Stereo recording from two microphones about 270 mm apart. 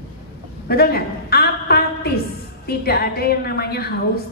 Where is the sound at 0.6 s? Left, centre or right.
Left.